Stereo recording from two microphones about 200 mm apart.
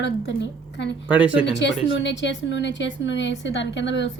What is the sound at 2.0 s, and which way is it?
A woman's voice, 60° left (ahead or behind).